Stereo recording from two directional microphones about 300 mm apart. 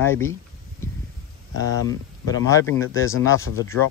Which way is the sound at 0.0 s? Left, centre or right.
Centre.